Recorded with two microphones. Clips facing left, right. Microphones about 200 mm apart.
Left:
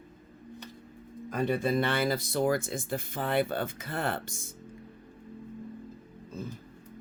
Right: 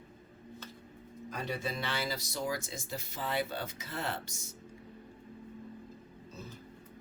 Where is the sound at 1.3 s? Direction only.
55° left (ahead or behind).